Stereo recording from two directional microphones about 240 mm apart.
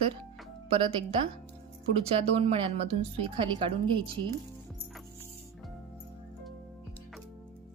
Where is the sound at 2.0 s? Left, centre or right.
Right.